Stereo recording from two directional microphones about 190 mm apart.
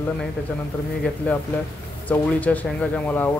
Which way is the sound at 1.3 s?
5° left (ahead or behind).